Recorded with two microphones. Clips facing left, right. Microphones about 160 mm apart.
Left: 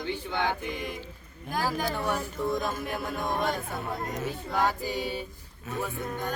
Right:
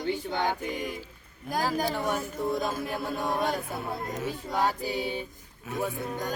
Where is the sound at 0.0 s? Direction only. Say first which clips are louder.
Right 1 dB; 40° right (ahead or behind).